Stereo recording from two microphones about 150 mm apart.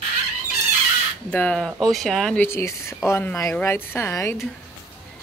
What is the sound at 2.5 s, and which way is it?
Speech, 20° left (ahead or behind).